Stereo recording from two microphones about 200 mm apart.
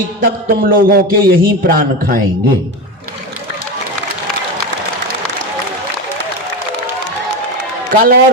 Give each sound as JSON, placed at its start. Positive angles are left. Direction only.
{"t": 0.2, "sound": "a man's voice", "side_deg": -50}
{"t": 7.9, "sound": "a man's voice", "side_deg": -45}